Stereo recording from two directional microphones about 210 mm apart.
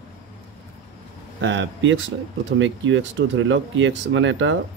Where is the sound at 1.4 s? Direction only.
60° right (ahead or behind).